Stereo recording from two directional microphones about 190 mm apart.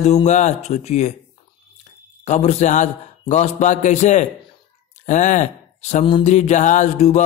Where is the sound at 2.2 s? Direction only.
35° left (ahead or behind).